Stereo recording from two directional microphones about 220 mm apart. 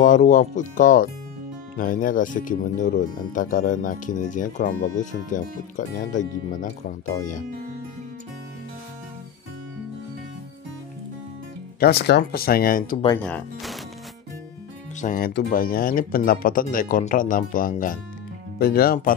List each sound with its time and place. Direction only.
0.0 s speech: 35° left (ahead or behind)
11.8 s speech: 45° left (ahead or behind)
13.2 s speech: 5° left (ahead or behind)
15.0 s speech: 40° left (ahead or behind)